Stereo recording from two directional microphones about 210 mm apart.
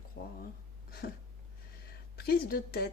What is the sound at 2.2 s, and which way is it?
Speech, 45° left (ahead or behind).